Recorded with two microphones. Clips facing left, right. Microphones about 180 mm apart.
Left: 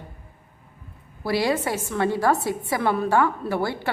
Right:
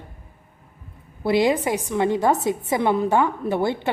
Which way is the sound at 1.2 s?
20° right (ahead or behind).